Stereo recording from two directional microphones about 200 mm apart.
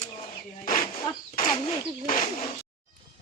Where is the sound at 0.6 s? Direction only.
45° left (ahead or behind).